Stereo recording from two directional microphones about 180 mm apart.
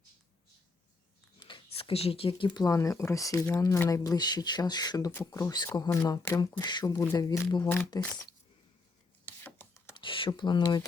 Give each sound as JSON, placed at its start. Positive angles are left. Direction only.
{"t": 1.4, "sound": "speech", "side_deg": 25}
{"t": 9.4, "sound": "a sound", "side_deg": 10}
{"t": 9.9, "sound": "speech", "side_deg": 25}